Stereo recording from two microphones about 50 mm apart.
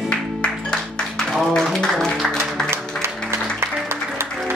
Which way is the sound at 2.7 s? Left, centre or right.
Right.